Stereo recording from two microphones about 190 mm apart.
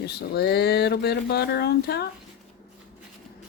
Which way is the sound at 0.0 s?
55° left (ahead or behind).